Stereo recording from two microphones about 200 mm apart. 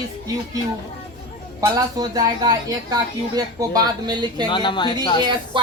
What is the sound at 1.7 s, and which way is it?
A woman's voice, 20° right (ahead or behind).